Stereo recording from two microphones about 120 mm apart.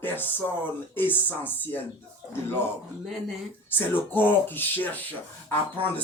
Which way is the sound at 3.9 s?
15° left (ahead or behind).